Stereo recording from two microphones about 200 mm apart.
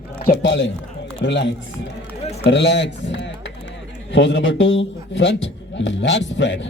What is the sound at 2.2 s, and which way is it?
Speech, 30° left (ahead or behind).